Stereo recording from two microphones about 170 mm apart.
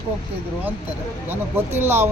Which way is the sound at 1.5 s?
15° right (ahead or behind).